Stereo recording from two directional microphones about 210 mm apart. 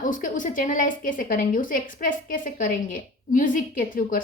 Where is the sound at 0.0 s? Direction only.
40° left (ahead or behind).